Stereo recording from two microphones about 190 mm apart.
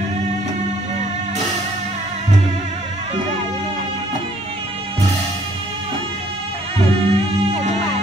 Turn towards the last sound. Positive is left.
turn(degrees=-30)  # may be behind; listen again after turning